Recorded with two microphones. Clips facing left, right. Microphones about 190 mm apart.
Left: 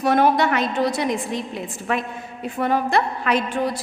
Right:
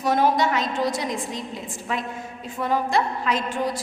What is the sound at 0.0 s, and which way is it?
A woman's voice, 60° left (ahead or behind).